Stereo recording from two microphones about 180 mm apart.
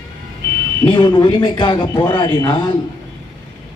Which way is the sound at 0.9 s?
25° left (ahead or behind).